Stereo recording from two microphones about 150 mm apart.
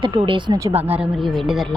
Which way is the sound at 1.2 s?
Centre (ahead or behind).